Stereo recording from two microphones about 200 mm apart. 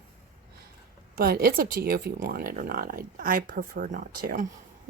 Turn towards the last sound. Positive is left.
turn(degrees=-45)  # may be behind; listen again after turning